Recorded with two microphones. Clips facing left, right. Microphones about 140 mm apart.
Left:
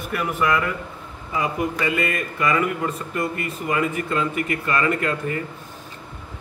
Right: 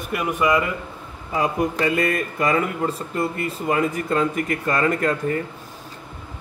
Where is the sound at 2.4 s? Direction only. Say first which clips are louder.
Left 1 dB; 35° right (ahead or behind).